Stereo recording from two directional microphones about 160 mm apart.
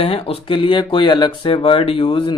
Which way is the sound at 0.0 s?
35° left (ahead or behind).